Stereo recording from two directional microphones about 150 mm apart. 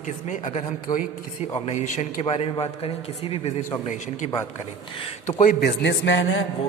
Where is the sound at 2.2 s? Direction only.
40° left (ahead or behind).